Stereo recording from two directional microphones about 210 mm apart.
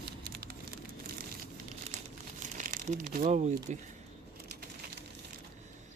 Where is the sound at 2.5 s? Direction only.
40° right (ahead or behind).